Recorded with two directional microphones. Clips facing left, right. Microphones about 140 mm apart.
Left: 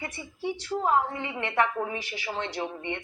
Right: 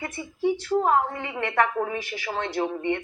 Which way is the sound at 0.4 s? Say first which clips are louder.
Right 7 dB; 15° right (ahead or behind).